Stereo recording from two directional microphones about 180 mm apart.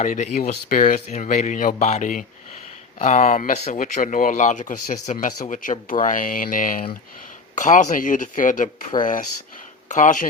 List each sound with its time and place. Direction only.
0.0 s speech: 40° left (ahead or behind)